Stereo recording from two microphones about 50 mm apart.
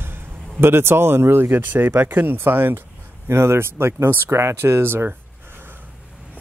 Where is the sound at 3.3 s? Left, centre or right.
Right.